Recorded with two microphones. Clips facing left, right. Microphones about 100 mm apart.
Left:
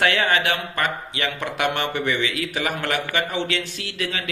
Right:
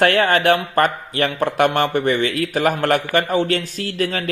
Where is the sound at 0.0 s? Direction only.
45° right (ahead or behind).